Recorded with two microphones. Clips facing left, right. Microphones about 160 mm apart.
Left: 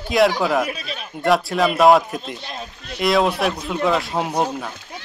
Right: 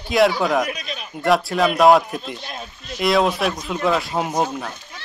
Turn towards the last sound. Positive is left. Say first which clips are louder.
# even
turn(degrees=0)  # may be behind; listen again after turning